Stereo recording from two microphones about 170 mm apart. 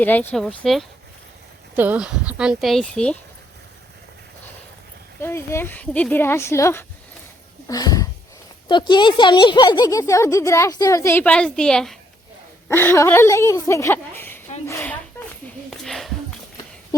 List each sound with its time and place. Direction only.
0.0 s speech: 10° left (ahead or behind)
1.7 s speech: 10° right (ahead or behind); by 3.2 s 5° left (ahead or behind)
5.2 s speech: 15° left (ahead or behind)
15.8 s a sound: centre (ahead or behind)